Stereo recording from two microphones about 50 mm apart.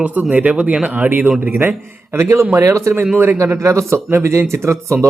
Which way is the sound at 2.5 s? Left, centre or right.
Right.